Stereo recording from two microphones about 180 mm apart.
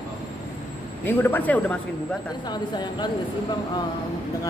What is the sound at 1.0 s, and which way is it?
Speech, 10° left (ahead or behind).